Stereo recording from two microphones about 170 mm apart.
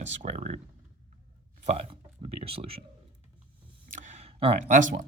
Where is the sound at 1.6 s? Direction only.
40° right (ahead or behind).